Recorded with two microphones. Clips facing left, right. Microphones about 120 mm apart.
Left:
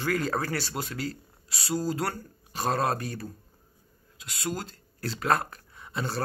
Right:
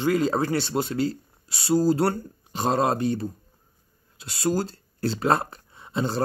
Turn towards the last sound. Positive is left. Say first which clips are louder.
# right 6 dB
turn(degrees=-25)  # may be behind; listen again after turning